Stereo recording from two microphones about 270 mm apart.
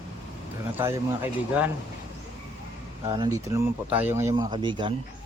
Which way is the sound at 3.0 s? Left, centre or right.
Centre.